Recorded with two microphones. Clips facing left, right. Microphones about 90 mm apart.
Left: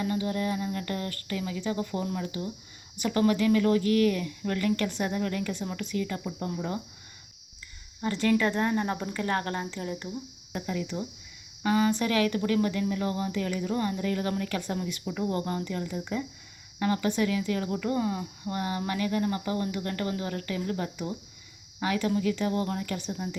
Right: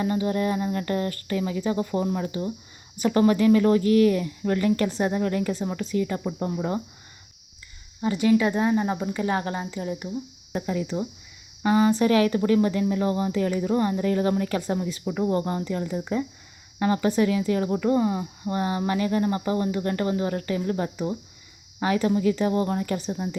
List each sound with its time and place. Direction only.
0.0 s speech: 35° right (ahead or behind)
8.0 s a woman's voice: 10° right (ahead or behind)
10.5 s speech: 30° right (ahead or behind)